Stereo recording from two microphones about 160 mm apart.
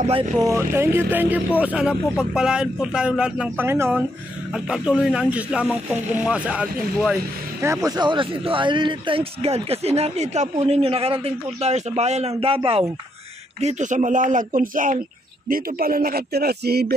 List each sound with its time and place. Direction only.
0.4 s speech: 20° right (ahead or behind)
7.6 s speech: 20° right (ahead or behind); by 12.8 s 35° right (ahead or behind)
13.6 s speech: 45° right (ahead or behind); by 16.9 s 85° right